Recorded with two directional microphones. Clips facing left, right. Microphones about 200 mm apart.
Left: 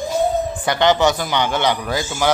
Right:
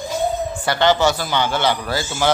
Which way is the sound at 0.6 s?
20° left (ahead or behind).